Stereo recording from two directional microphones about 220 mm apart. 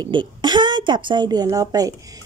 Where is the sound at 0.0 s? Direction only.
20° right (ahead or behind).